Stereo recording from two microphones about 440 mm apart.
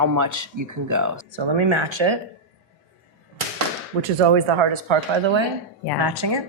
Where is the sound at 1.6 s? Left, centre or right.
Right.